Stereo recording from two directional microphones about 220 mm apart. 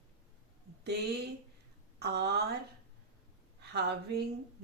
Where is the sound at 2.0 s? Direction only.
45° right (ahead or behind).